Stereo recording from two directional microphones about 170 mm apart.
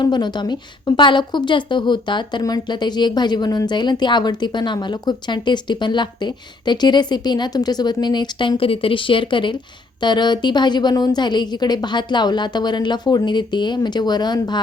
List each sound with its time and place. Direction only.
0.0 s a woman's voice: 25° left (ahead or behind)